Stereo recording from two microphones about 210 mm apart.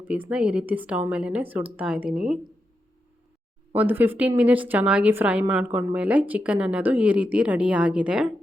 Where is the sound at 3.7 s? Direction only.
10° right (ahead or behind).